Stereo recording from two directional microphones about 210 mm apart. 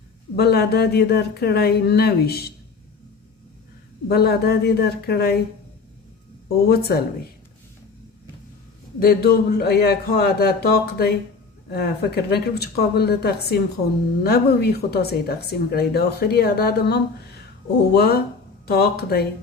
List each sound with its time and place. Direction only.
0.3 s speech: 50° left (ahead or behind)
4.1 s speech: 50° left (ahead or behind)
6.7 s speech: 50° left (ahead or behind)
9.0 s speech: 45° left (ahead or behind)